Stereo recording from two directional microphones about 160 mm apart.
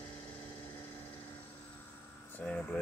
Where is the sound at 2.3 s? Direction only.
5° left (ahead or behind).